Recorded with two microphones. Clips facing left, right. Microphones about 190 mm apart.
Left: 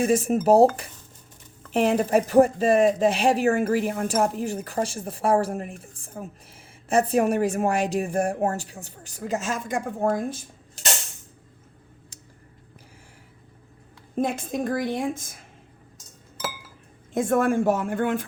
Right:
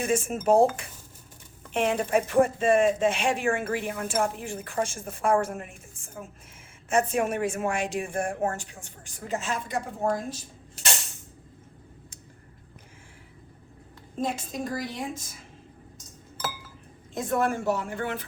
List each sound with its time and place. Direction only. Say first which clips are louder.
0.0 s speech: left 5 dB; 35° left (ahead or behind)
1.7 s speech: left 4 dB; 40° left (ahead or behind); by 10.4 s 55° left (ahead or behind)
14.2 s a woman's voice: left 5 dB; 55° left (ahead or behind)
17.2 s a woman's voice: left 5 dB; 50° left (ahead or behind)